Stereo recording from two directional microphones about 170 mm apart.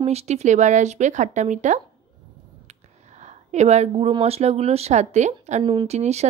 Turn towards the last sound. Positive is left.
turn(degrees=-40)  # may be behind; listen again after turning